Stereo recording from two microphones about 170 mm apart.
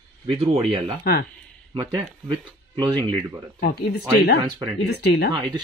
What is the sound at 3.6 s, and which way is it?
Speech, 70° left (ahead or behind).